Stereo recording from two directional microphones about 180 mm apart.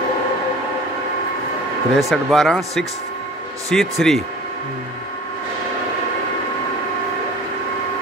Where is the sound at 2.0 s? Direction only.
Centre (ahead or behind).